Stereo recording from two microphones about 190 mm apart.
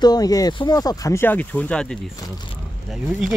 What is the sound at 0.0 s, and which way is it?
Speech, 20° left (ahead or behind).